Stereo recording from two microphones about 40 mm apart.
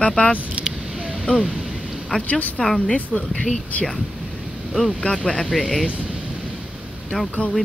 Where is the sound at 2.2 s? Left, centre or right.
Left.